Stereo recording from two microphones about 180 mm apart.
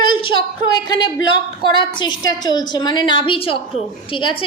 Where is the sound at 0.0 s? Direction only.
30° left (ahead or behind).